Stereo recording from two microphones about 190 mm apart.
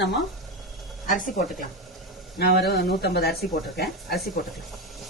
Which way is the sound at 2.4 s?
55° left (ahead or behind).